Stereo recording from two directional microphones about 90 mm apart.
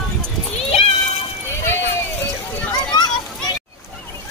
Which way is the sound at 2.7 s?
50° left (ahead or behind).